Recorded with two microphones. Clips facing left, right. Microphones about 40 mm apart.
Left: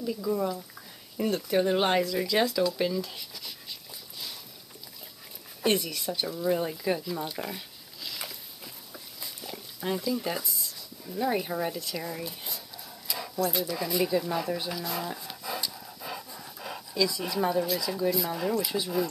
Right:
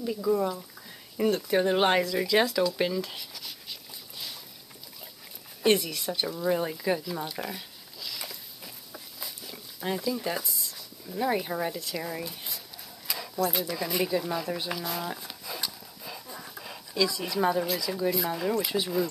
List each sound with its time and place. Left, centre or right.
0.0 s speech: centre
3.2 s speech: centre
5.6 s speech: centre
8.0 s a sound: centre
9.8 s speech: centre
13.4 s speech: centre
16.0 s a sound: centre
16.3 s dog: centre
17.1 s speech: centre
17.4 s speech: centre